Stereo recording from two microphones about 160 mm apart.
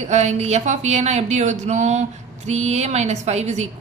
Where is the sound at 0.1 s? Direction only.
45° right (ahead or behind).